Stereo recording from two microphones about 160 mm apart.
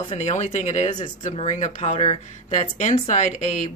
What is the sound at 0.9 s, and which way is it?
Speech, 30° left (ahead or behind).